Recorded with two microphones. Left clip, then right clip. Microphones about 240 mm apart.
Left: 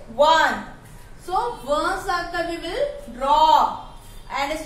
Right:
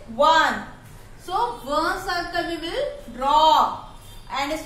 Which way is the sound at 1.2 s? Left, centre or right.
Centre.